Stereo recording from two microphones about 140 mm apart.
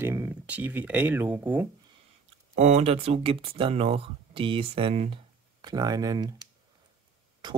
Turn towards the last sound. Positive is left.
turn(degrees=-30)  # may be behind; listen again after turning